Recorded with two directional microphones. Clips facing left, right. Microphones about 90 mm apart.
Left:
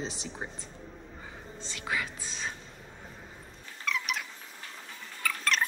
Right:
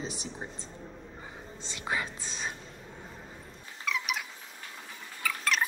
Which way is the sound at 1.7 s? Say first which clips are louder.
Right 1 dB; 25° right (ahead or behind).